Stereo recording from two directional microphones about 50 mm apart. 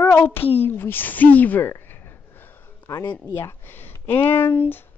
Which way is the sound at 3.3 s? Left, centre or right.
Left.